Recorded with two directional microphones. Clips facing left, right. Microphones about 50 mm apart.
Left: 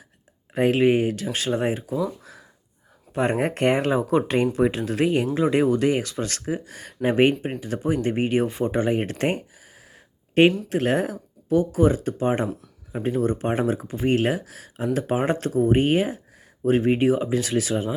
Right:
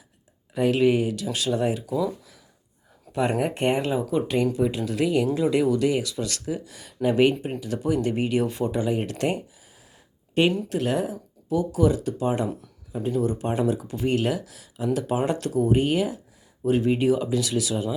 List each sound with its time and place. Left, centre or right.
0.5 s speech: left
3.1 s speech: left
3.5 s speech: left